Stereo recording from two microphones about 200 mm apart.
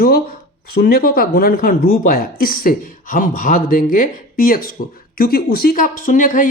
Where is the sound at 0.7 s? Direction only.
50° left (ahead or behind).